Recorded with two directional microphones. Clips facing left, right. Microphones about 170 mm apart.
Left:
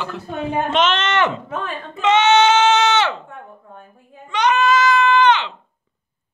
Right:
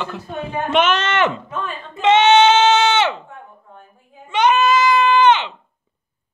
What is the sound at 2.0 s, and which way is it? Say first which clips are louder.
Goat: right 2 dB; 25° right (ahead or behind).